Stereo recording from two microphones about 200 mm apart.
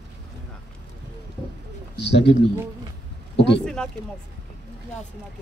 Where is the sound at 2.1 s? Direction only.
60° left (ahead or behind).